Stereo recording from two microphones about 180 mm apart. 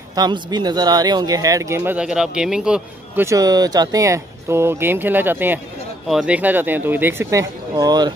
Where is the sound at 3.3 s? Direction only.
20° right (ahead or behind).